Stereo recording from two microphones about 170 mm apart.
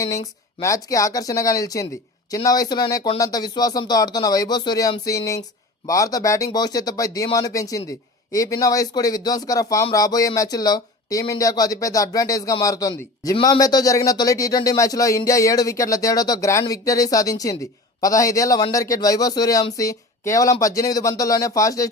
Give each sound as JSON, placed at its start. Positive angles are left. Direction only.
{"t": 0.6, "sound": "speech", "side_deg": 20}